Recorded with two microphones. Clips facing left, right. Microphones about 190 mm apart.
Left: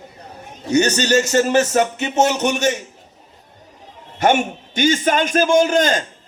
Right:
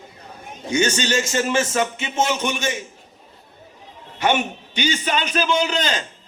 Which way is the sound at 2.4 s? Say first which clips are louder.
Left 6 dB; 70° left (ahead or behind).